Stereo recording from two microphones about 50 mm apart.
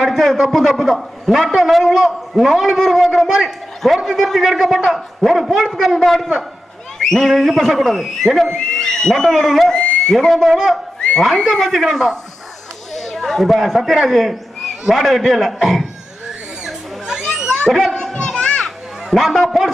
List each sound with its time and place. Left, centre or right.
0.0 s a man's voice: centre
16.6 s a sound: centre
17.7 s a man's voice: centre
18.0 s children playing: centre
19.1 s a man's voice: centre